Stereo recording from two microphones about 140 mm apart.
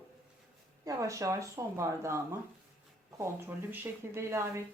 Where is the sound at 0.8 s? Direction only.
25° right (ahead or behind).